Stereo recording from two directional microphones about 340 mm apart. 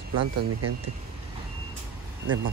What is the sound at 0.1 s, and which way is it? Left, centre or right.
Speech, right.